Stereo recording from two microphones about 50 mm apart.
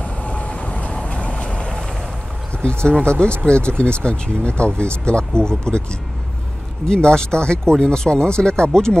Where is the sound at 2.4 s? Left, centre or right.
Centre.